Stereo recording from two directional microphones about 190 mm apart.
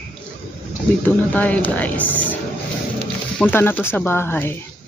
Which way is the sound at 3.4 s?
10° left (ahead or behind).